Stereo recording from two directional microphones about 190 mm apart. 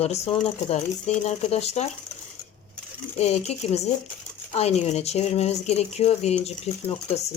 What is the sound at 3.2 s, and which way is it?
Speech, 35° left (ahead or behind).